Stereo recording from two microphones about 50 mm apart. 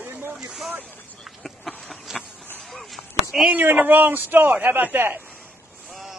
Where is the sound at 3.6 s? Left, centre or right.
Right.